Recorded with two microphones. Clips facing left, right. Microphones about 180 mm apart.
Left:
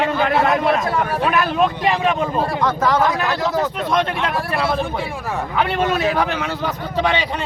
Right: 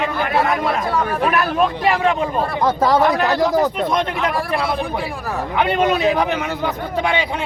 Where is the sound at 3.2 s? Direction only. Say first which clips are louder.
Right 4 dB; 15° right (ahead or behind).